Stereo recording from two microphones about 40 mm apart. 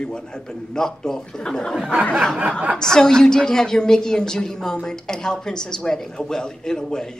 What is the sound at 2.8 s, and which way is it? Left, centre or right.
A woman's voice, centre.